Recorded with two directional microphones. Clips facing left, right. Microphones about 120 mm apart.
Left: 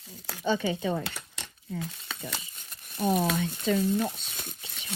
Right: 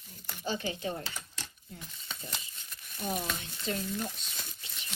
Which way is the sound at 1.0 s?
65° left (ahead or behind).